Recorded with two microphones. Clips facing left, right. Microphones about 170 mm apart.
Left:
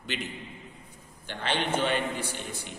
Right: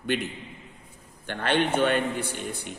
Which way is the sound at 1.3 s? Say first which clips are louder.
Right 5 dB; 55° right (ahead or behind).